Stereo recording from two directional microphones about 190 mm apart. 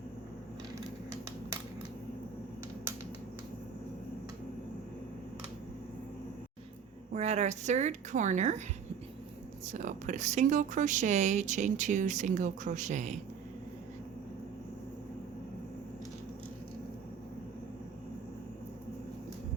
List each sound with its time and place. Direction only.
7.1 s speech: 35° right (ahead or behind)
9.7 s speech: 40° right (ahead or behind)